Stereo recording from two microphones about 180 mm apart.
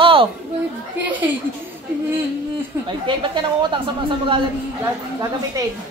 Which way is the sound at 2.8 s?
25° right (ahead or behind).